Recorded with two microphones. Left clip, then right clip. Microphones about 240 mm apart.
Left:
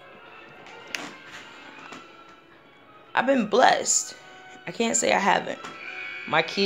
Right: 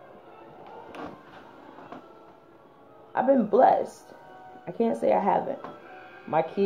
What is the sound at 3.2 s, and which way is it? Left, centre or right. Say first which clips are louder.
Speech: right 1 dB; left.